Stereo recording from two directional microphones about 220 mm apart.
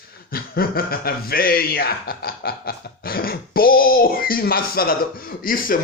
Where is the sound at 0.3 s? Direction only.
45° left (ahead or behind).